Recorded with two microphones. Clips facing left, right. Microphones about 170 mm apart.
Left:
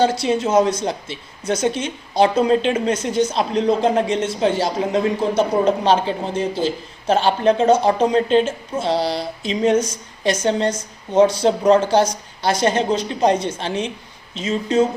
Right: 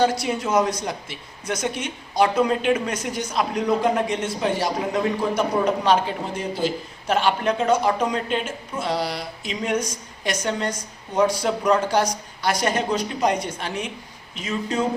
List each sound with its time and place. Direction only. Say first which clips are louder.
0.0 s a woman's voice: left 4 dB; 25° left (ahead or behind)